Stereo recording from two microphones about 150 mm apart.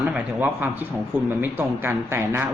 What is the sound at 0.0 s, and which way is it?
Speech, 10° right (ahead or behind).